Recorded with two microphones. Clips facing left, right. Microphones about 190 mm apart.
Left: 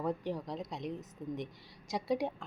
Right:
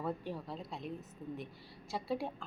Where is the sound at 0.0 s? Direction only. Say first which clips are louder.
Left 4 dB; 15° left (ahead or behind).